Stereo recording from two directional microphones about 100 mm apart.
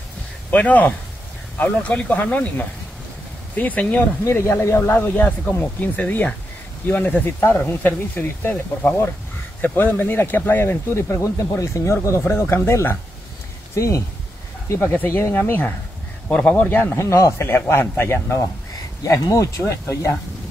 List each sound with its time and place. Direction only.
0.5 s speech: 15° left (ahead or behind)
4.2 s speech: 25° left (ahead or behind)
14.7 s speech: 20° left (ahead or behind)